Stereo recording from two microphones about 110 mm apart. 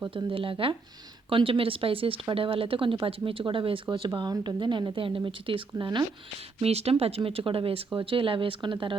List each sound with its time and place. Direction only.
0.1 s speech: 50° right (ahead or behind)
6.6 s speech: 70° right (ahead or behind); by 9.0 s 50° right (ahead or behind)